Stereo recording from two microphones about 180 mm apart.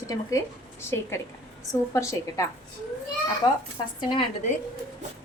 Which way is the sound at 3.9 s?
25° left (ahead or behind).